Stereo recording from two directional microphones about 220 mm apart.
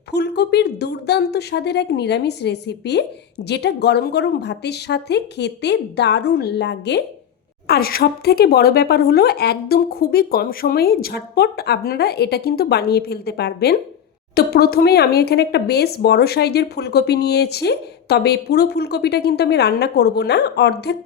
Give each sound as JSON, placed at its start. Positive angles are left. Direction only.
{"t": 0.1, "sound": "a woman's voice", "side_deg": 50}